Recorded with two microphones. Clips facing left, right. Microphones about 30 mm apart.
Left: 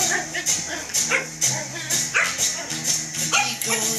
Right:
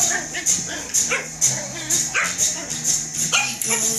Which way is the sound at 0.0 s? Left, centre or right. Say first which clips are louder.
Even; left.